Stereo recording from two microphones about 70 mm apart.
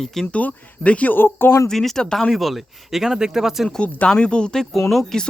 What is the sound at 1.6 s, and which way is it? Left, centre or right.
Speech, centre.